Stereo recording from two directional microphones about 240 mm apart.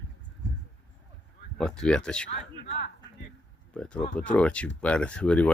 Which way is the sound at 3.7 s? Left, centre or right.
Centre.